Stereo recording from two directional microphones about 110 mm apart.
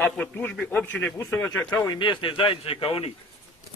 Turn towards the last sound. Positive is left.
turn(degrees=60)  # may be behind; listen again after turning